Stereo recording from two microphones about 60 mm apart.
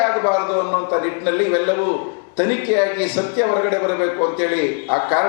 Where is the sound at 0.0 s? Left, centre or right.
Left.